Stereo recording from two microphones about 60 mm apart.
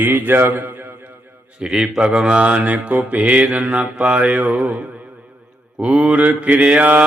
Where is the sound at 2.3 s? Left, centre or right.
Right.